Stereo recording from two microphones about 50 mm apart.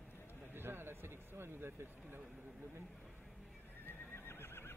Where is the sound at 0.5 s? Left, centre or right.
Right.